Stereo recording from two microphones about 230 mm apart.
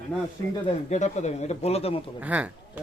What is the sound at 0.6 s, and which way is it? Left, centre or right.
Speech, left.